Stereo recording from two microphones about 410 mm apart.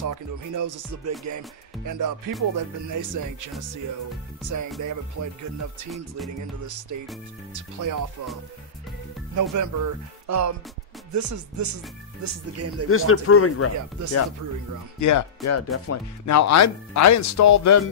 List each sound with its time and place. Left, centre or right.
0.6 s speech: right
6.6 s speech: right
9.3 s speech: right
12.8 s speech: left
14.0 s speech: right
15.0 s speech: left